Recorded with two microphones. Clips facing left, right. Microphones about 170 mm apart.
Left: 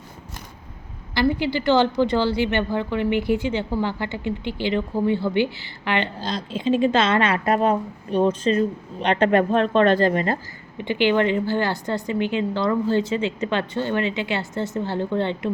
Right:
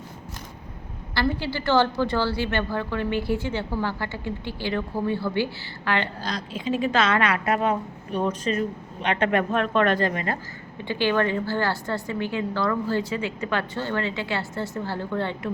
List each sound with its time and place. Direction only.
1.1 s a woman's voice: 15° left (ahead or behind); by 10.3 s 30° left (ahead or behind)
10.8 s a woman's voice: 20° left (ahead or behind)